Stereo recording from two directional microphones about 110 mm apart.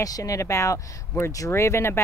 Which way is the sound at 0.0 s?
30° left (ahead or behind).